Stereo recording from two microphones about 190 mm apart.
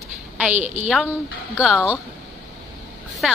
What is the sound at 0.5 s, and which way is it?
Speech, 40° right (ahead or behind).